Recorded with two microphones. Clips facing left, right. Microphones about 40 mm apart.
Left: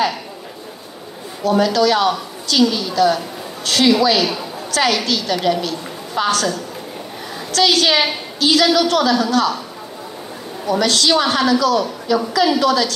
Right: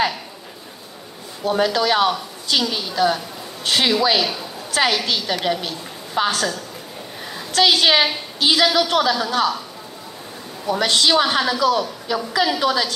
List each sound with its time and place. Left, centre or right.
1.6 s a woman's voice: right
7.5 s a woman's voice: right
10.7 s a woman's voice: centre